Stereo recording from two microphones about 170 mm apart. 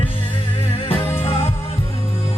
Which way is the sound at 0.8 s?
30° left (ahead or behind).